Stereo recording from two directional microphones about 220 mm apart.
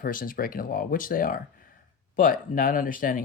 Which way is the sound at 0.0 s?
40° left (ahead or behind).